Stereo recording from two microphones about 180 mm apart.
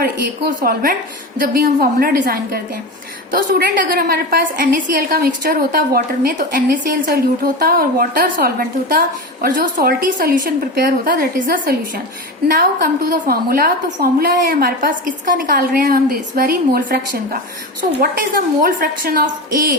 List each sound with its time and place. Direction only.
0.0 s a woman's voice: 55° right (ahead or behind)